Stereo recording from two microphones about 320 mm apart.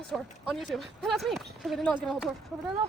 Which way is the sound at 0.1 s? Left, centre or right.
Centre.